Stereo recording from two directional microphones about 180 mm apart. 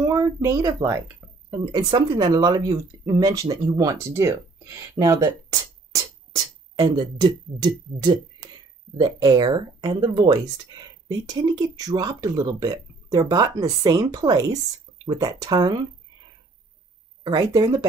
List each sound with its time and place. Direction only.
0.0 s speech: 20° right (ahead or behind)
17.2 s speech: 20° right (ahead or behind)